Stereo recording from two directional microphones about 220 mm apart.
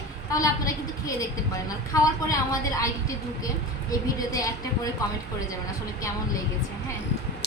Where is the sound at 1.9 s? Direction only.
15° left (ahead or behind).